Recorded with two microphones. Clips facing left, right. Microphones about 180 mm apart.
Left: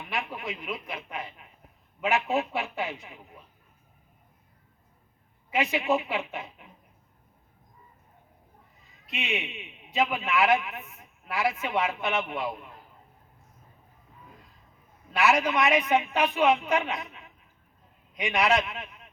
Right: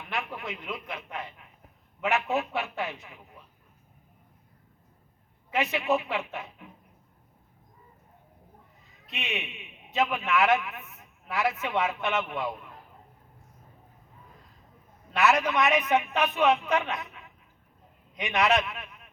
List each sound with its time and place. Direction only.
0.1 s a sound: 15° left (ahead or behind)
2.0 s speech: 10° left (ahead or behind)
5.5 s a woman's voice: 15° left (ahead or behind)
9.0 s a man's voice: 15° left (ahead or behind)
10.6 s a man's voice: 30° left (ahead or behind)
11.3 s speech: 15° left (ahead or behind)
15.1 s speech: 10° left (ahead or behind)
18.6 s a man's voice: 25° left (ahead or behind)